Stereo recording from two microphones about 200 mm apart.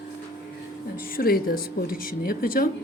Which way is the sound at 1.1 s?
50° left (ahead or behind).